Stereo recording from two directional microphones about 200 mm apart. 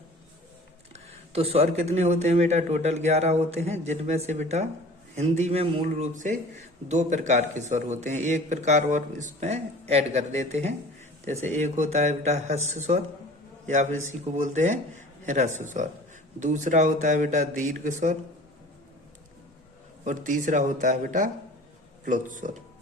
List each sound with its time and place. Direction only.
0.9 s a man's voice: 30° right (ahead or behind)
20.1 s a man's voice: 40° right (ahead or behind)